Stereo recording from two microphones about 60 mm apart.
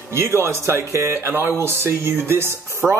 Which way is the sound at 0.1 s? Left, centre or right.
Right.